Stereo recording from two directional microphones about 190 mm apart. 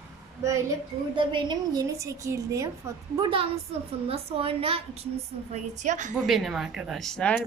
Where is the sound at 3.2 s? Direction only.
30° right (ahead or behind).